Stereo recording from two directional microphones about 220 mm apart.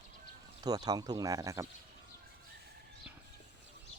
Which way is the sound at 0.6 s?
15° right (ahead or behind).